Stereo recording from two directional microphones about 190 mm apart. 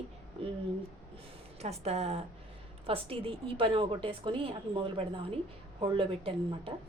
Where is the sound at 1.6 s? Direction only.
35° right (ahead or behind).